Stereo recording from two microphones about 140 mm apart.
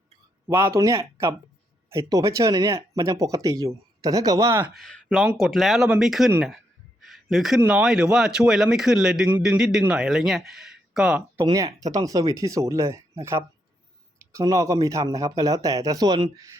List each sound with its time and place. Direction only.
0.4 s speech: 20° right (ahead or behind)
4.7 s speech: 5° left (ahead or behind)
7.0 s a sound: centre (ahead or behind)
7.6 s speech: 5° right (ahead or behind)
11.4 s speech: 25° right (ahead or behind)